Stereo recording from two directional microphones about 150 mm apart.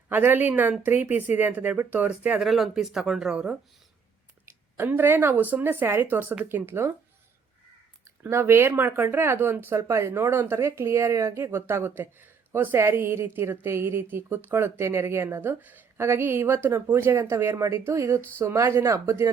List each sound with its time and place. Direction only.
0.1 s speech: 15° right (ahead or behind)
4.8 s speech: 15° right (ahead or behind)
8.2 s speech: 15° right (ahead or behind)